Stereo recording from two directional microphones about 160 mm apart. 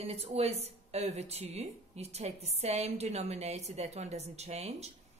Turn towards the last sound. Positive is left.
turn(degrees=-40)  # may be behind; listen again after turning